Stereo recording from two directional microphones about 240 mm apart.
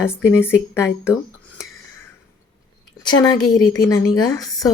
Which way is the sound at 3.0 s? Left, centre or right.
Centre.